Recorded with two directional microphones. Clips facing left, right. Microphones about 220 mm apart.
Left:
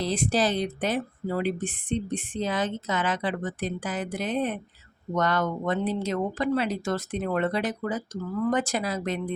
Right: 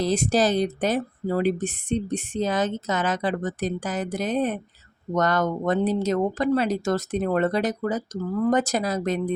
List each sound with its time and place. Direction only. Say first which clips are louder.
0.0 s speech: right 4 dB; 45° right (ahead or behind)